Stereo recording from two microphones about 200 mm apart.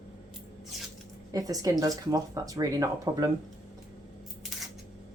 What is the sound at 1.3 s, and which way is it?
Speech, 15° right (ahead or behind).